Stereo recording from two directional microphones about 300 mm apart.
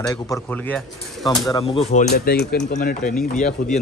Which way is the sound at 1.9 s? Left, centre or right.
Left.